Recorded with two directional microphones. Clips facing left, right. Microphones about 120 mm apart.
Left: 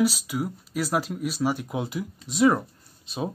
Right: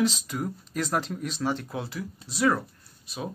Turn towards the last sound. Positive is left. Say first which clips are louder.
# left 5 dB
turn(degrees=25)  # may be behind; listen again after turning